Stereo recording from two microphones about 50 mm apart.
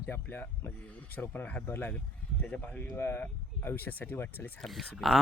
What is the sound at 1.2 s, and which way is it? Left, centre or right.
Speech, left.